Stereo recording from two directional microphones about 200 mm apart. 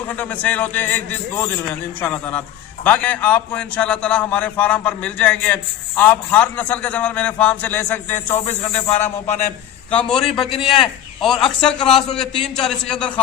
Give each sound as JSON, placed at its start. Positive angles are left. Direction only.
{"t": 0.1, "sound": "a man's voice", "side_deg": 5}
{"t": 8.4, "sound": "snake", "side_deg": 35}
{"t": 9.9, "sound": "a man's voice", "side_deg": 5}
{"t": 10.2, "sound": "a man's voice", "side_deg": 25}
{"t": 11.2, "sound": "a man's voice", "side_deg": 0}